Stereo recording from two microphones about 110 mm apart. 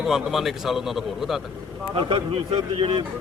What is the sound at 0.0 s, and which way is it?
A man's voice, 5° right (ahead or behind).